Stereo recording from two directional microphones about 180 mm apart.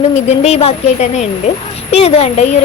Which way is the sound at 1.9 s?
35° left (ahead or behind).